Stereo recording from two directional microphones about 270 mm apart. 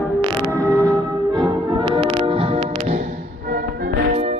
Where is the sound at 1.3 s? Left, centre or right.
Centre.